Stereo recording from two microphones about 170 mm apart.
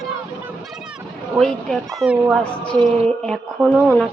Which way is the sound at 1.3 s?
Centre (ahead or behind).